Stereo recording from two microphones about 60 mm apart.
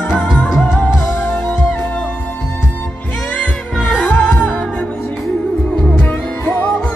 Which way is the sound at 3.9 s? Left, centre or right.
Centre.